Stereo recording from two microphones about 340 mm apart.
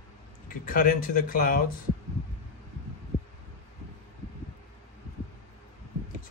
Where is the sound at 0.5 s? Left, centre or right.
Left.